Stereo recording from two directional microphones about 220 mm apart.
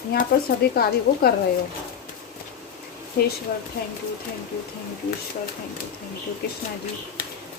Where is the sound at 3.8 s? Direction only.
45° left (ahead or behind).